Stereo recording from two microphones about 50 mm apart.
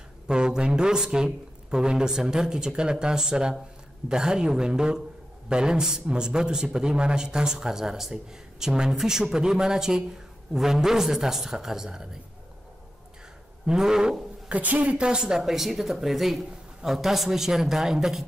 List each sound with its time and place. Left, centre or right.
0.3 s a man's voice: centre
13.7 s a man's voice: centre
14.5 s a woman's voice: right
15.0 s a man's voice: centre